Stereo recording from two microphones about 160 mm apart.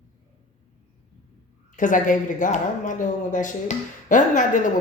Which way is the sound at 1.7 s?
55° left (ahead or behind).